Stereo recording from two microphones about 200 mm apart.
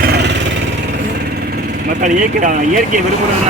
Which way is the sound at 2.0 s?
40° right (ahead or behind).